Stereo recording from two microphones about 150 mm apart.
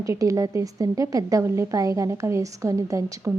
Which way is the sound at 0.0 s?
20° right (ahead or behind).